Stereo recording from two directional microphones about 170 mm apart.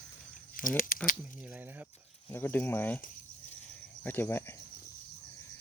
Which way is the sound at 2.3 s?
15° left (ahead or behind).